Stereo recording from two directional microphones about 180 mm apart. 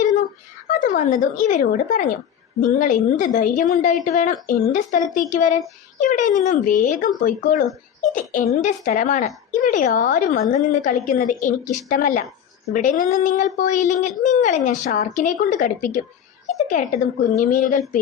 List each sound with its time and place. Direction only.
0.0 s a sound: 45° left (ahead or behind)
0.7 s a woman's voice: 45° left (ahead or behind)
17.2 s a woman's voice: 45° left (ahead or behind)